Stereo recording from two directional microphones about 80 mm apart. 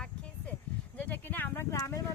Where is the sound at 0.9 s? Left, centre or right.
Left.